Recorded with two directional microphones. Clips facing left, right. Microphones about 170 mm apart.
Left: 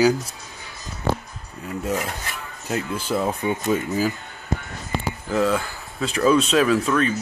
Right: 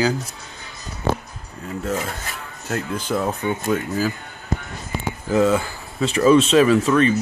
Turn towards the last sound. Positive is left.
turn(degrees=0)  # may be behind; listen again after turning